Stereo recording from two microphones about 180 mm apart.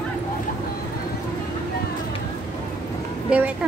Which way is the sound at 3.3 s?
5° right (ahead or behind).